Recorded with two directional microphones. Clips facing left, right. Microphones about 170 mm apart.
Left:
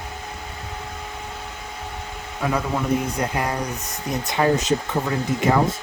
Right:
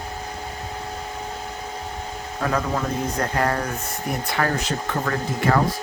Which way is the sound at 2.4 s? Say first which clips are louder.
Left 1 dB; 15° left (ahead or behind).